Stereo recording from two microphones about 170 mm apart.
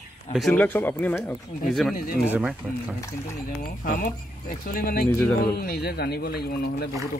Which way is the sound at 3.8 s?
60° left (ahead or behind).